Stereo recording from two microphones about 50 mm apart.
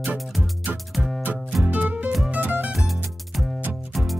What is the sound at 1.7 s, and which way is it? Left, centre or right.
Music, right.